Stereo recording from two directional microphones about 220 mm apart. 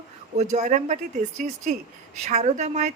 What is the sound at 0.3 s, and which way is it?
Speech, 35° right (ahead or behind).